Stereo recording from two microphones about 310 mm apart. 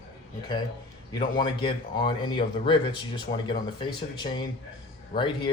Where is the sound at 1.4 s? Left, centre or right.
Centre.